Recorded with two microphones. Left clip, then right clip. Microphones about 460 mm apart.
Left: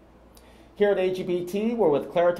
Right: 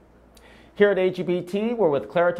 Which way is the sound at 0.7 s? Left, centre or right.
Right.